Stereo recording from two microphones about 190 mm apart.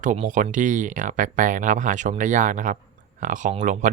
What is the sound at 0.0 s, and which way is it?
Speech, 40° right (ahead or behind).